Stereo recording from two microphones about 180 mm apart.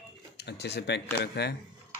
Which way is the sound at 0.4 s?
65° left (ahead or behind).